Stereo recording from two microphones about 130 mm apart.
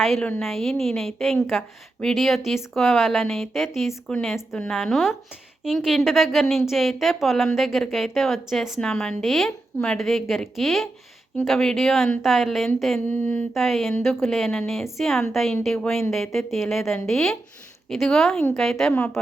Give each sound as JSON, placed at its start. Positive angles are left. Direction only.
{"t": 0.0, "sound": "a woman's voice", "side_deg": 0}
{"t": 13.1, "sound": "speech", "side_deg": 15}
{"t": 13.5, "sound": "a woman's voice", "side_deg": 0}